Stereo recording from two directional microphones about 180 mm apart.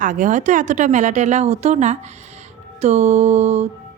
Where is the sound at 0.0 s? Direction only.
45° right (ahead or behind).